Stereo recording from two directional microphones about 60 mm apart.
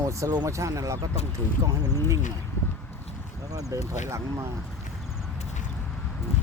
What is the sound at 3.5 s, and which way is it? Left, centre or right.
Speech, right.